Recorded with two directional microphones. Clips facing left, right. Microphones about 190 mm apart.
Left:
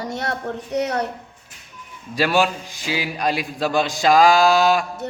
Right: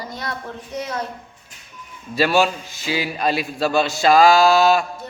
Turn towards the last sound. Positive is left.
turn(degrees=15)  # may be behind; listen again after turning